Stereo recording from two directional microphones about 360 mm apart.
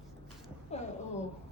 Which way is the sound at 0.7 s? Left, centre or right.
Centre.